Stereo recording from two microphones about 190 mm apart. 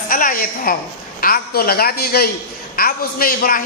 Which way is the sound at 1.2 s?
50° left (ahead or behind).